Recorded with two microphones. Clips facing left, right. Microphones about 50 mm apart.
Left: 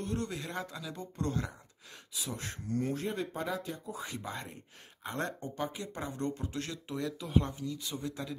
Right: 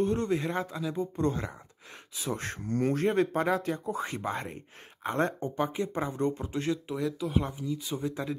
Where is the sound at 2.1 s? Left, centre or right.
Right; by 6.8 s centre.